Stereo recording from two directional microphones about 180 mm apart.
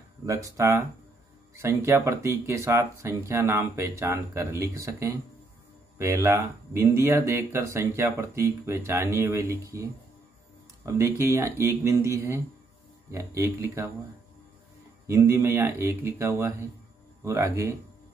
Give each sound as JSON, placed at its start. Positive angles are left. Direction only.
{"t": 0.3, "sound": "speech", "side_deg": -15}
{"t": 10.9, "sound": "speech", "side_deg": -15}
{"t": 15.0, "sound": "speech", "side_deg": -15}